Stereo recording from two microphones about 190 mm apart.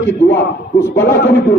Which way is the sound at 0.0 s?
65° left (ahead or behind).